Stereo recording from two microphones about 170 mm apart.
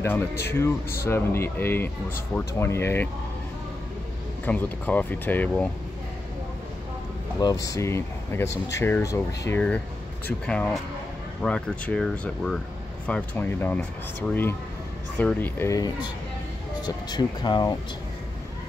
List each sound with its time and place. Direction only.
0.0 s speech: 15° left (ahead or behind)
4.5 s speech: 10° left (ahead or behind)
7.3 s speech: 20° left (ahead or behind)